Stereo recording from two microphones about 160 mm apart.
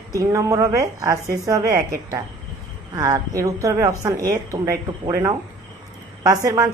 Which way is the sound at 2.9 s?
20° right (ahead or behind).